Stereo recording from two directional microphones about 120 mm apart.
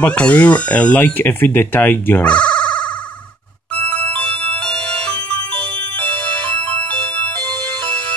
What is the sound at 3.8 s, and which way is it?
Music, 10° left (ahead or behind).